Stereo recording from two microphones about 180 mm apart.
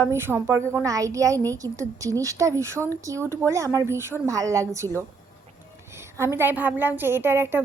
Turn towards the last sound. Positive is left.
turn(degrees=-10)  # may be behind; listen again after turning